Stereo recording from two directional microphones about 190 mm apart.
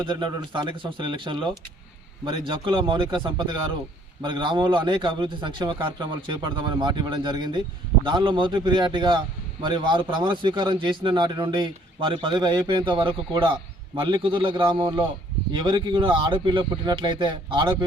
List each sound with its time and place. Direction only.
0.0 s a man's voice: 25° right (ahead or behind)